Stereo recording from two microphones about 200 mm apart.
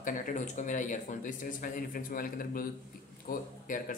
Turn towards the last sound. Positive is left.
turn(degrees=40)  # may be behind; listen again after turning